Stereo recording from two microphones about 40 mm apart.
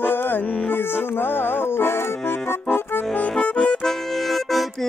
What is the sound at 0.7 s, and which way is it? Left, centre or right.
Accordion, left.